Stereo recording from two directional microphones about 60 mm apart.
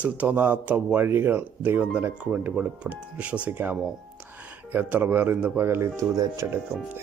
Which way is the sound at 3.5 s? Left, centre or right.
Right.